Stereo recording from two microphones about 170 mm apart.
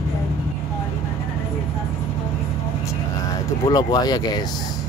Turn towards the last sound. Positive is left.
turn(degrees=25)  # may be behind; listen again after turning